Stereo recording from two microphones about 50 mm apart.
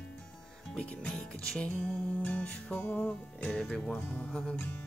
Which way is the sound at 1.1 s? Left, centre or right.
Centre.